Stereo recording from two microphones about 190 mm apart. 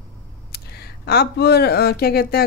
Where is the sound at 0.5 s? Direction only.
55° left (ahead or behind).